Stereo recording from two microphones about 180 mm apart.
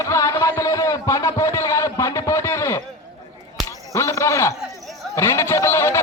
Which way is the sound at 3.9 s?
15° left (ahead or behind).